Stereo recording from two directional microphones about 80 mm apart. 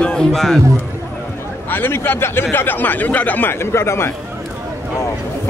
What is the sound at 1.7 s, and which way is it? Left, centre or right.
Speech, left.